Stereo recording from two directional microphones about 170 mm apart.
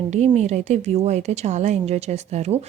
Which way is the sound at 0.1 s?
40° right (ahead or behind).